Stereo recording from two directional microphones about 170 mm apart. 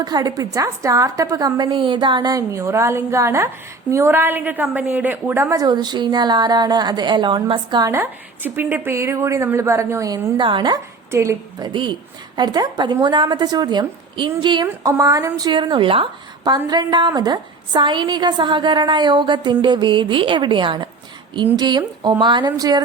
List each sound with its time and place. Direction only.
0.0 s a woman's voice: 25° right (ahead or behind)
11.1 s a woman's voice: 15° right (ahead or behind)
11.7 s a woman's voice: 30° right (ahead or behind)